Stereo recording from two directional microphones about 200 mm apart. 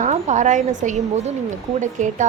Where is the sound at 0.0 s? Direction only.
35° right (ahead or behind).